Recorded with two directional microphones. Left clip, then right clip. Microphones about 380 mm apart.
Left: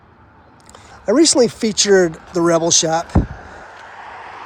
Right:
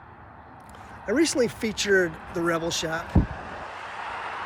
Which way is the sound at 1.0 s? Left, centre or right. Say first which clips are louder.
Left 10 dB; centre.